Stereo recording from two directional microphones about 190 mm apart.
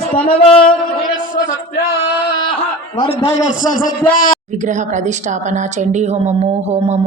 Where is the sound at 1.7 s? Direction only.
55° left (ahead or behind).